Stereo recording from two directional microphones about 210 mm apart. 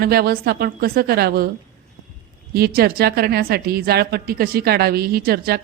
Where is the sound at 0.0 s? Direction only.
45° right (ahead or behind).